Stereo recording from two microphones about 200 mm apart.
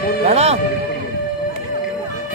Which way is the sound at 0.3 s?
35° right (ahead or behind).